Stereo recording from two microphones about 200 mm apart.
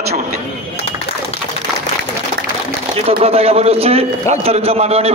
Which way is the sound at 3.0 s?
30° right (ahead or behind).